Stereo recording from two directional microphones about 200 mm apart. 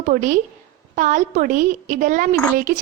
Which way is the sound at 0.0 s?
40° right (ahead or behind).